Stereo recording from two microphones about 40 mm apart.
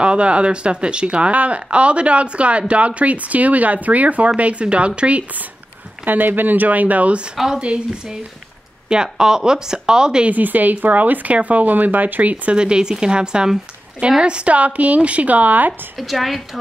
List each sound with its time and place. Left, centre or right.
0.0 s speech: right
6.0 s speech: right; by 10.2 s centre
10.3 s speech: right
12.5 s speech: right
16.0 s a woman's voice: centre